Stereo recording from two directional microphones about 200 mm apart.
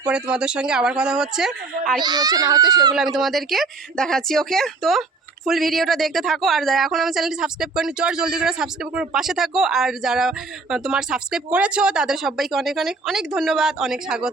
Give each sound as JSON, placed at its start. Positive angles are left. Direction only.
{"t": 0.0, "sound": "speech", "side_deg": -5}
{"t": 2.0, "sound": "a child's voice", "side_deg": -20}
{"t": 3.2, "sound": "speech", "side_deg": 0}